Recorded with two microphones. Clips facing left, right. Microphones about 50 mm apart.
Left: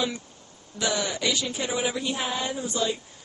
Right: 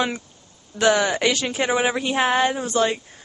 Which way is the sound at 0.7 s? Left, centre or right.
Right.